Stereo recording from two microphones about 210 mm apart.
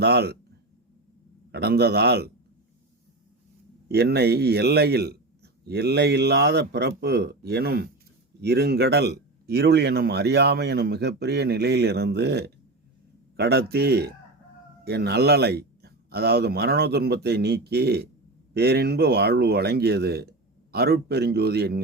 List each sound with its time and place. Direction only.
0.0 s speech: 50° right (ahead or behind)
1.5 s speech: 50° right (ahead or behind)
3.8 s speech: 50° right (ahead or behind)